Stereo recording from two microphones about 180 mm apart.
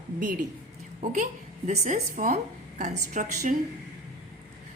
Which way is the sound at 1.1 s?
40° right (ahead or behind).